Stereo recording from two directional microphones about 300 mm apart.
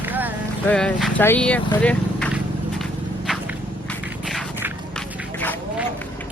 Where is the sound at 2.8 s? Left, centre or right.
Centre.